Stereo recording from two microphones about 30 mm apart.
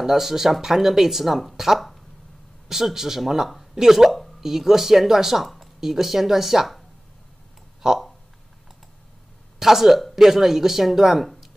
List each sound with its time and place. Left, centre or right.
0.0 s speech: centre
2.7 s speech: centre
7.8 s speech: centre
9.6 s speech: centre